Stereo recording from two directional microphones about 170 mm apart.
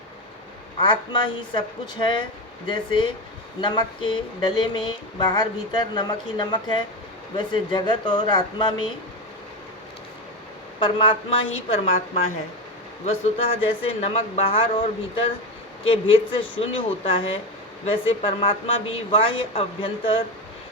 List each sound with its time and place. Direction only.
0.8 s a sound: 30° left (ahead or behind)
10.8 s speech: 30° left (ahead or behind)
16.7 s speech: 30° left (ahead or behind)